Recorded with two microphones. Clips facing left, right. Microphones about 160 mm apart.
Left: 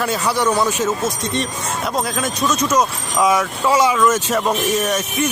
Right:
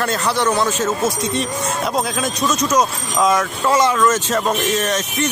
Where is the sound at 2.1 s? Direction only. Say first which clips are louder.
Even; centre (ahead or behind).